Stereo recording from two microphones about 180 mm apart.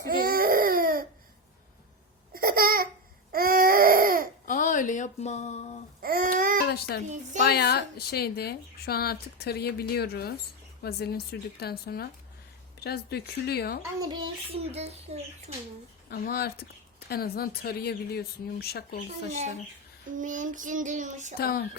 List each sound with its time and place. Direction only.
0.1 s baby cry: 55° right (ahead or behind)
2.3 s babbling: 55° right (ahead or behind)
3.3 s baby cry: 55° right (ahead or behind)
4.4 s a sound: 45° left (ahead or behind)
6.0 s babbling: 55° right (ahead or behind)
6.6 s a child's voice: 65° left (ahead or behind)
7.0 s a child's voice: 40° right (ahead or behind)
7.4 s a woman's voice: 65° left (ahead or behind)
14.0 s a child's voice: 25° right (ahead or behind)
16.0 s a woman's voice: 55° left (ahead or behind)
20.1 s child singing: 45° right (ahead or behind)
21.3 s a woman's voice: 55° left (ahead or behind)